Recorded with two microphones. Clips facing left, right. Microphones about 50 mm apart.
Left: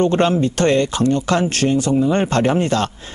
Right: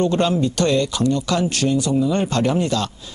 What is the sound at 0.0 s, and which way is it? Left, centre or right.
Speech, left.